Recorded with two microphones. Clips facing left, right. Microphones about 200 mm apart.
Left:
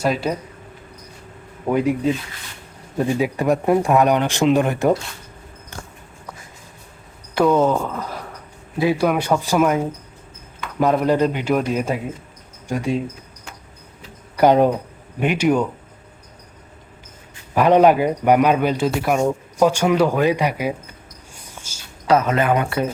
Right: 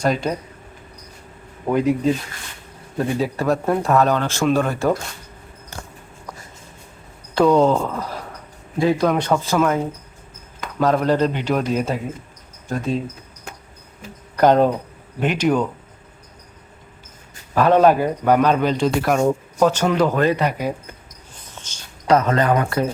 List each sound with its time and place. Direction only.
0.0 s speech: 5° left (ahead or behind)
1.6 s speech: 10° left (ahead or behind)
3.0 s a man's voice: 15° left (ahead or behind)
7.3 s a man's voice: centre (ahead or behind)
14.3 s a man's voice: 10° left (ahead or behind)
17.5 s a man's voice: 15° left (ahead or behind)
21.3 s a sound: 10° left (ahead or behind)